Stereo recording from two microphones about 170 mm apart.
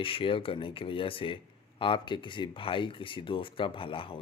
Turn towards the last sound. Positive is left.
turn(degrees=30)  # may be behind; listen again after turning